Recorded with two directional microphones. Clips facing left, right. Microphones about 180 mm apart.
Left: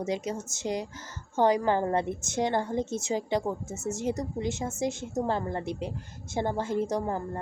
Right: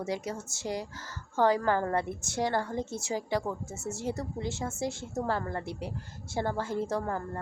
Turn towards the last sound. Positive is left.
turn(degrees=20)  # may be behind; listen again after turning